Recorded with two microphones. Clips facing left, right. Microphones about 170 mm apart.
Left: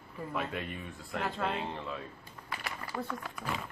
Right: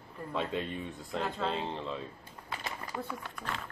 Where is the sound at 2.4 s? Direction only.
20° right (ahead or behind).